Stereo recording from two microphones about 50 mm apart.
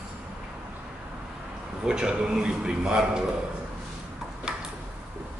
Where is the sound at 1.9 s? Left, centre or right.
Centre.